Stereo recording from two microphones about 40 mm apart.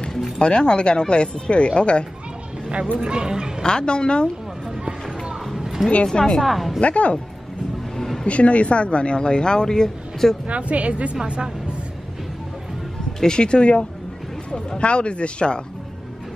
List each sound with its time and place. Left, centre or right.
0.4 s speech: left
3.0 s speech: right
3.6 s speech: left
5.6 s a sound: centre
6.1 s a woman's voice: centre
6.4 s a woman's voice: centre
6.8 s a woman's voice: left
8.0 s a sound: centre
8.3 s speech: left; by 10.3 s centre
10.4 s a woman's voice: right
13.2 s speech: left